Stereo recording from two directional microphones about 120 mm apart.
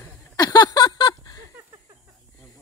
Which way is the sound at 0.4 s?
30° left (ahead or behind).